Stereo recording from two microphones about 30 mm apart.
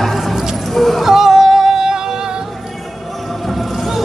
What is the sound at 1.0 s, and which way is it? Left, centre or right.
Music, centre.